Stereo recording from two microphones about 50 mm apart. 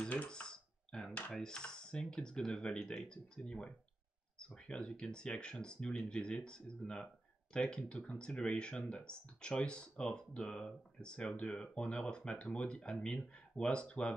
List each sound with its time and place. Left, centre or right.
0.3 s typing: centre
1.3 s speech: centre